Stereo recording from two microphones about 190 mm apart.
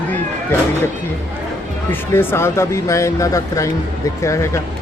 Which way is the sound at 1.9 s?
10° left (ahead or behind).